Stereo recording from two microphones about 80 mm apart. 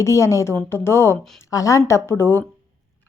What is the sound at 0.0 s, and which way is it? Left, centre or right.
A woman's voice, left.